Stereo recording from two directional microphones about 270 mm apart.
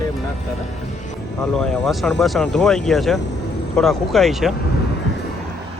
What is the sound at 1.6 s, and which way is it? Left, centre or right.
Speech, centre.